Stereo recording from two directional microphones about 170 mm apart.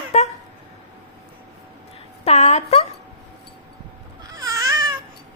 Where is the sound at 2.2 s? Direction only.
40° left (ahead or behind).